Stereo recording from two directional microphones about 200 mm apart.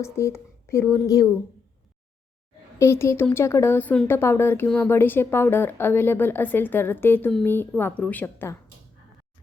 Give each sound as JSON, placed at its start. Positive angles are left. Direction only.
{"t": 0.0, "sound": "speech", "side_deg": 15}
{"t": 2.7, "sound": "speech", "side_deg": 15}